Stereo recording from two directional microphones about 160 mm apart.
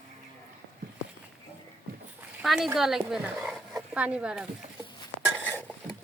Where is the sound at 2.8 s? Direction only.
Centre (ahead or behind).